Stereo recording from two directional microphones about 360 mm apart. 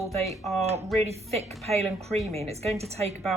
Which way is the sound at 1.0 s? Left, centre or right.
Centre.